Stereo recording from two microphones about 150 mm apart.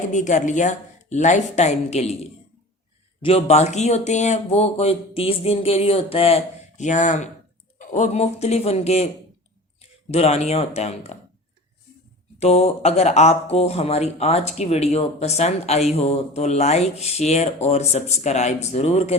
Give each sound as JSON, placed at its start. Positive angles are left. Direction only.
{"t": 0.1, "sound": "speech", "side_deg": 55}
{"t": 10.1, "sound": "speech", "side_deg": 45}
{"t": 12.4, "sound": "speech", "side_deg": 45}